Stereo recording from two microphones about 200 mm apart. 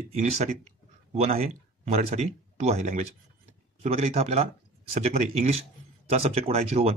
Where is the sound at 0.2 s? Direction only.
35° right (ahead or behind).